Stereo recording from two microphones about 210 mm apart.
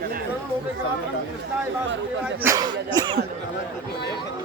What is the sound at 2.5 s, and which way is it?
Speech, 20° right (ahead or behind).